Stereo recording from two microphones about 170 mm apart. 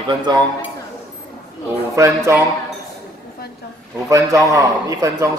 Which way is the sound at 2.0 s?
20° right (ahead or behind).